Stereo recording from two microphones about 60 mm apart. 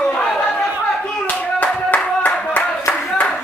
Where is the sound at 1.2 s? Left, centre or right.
Left.